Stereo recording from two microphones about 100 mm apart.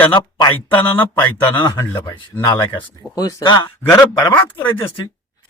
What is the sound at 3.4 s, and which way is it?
Speech, 50° left (ahead or behind).